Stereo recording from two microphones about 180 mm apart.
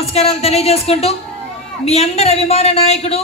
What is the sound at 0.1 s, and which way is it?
A woman's voice, 35° left (ahead or behind).